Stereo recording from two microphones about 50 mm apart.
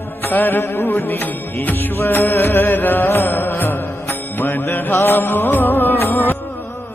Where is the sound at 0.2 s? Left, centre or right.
Left.